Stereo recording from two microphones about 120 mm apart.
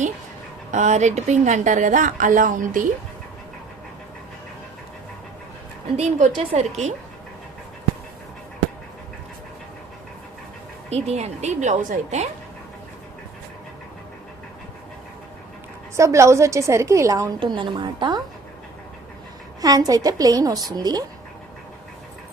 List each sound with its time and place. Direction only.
0.7 s speech: 75° right (ahead or behind)
6.0 s a woman's voice: 75° right (ahead or behind)
10.8 s a woman's voice: 65° right (ahead or behind); by 12.3 s 80° right
16.0 s a woman's voice: 25° right (ahead or behind)
17.4 s a woman's voice: 40° right (ahead or behind)
19.6 s a woman's voice: 30° right (ahead or behind)